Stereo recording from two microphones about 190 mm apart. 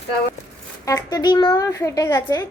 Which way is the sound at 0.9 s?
20° left (ahead or behind).